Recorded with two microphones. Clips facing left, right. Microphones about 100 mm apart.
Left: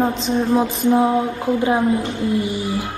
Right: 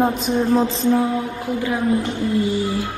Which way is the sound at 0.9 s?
25° left (ahead or behind).